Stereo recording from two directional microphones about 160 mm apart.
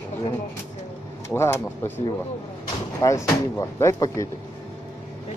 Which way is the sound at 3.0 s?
20° left (ahead or behind).